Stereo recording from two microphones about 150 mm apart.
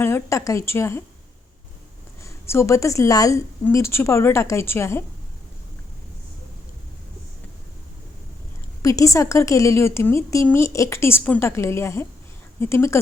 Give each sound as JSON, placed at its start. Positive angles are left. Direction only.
{"t": 0.0, "sound": "a woman's voice", "side_deg": 20}
{"t": 2.2, "sound": "a woman's voice", "side_deg": 20}
{"t": 8.8, "sound": "a woman's voice", "side_deg": 20}